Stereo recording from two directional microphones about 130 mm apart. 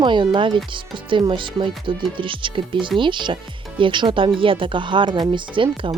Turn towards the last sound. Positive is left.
turn(degrees=-40)  # may be behind; listen again after turning